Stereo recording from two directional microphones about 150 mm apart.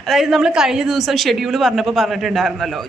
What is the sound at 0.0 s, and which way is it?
A woman's voice, centre (ahead or behind).